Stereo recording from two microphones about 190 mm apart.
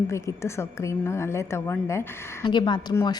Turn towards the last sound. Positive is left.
turn(degrees=20)  # may be behind; listen again after turning